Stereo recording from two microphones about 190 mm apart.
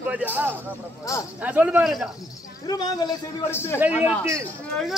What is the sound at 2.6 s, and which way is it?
A man's voice, 20° left (ahead or behind).